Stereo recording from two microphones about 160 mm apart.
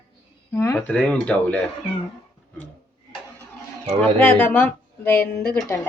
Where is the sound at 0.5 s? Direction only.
15° left (ahead or behind).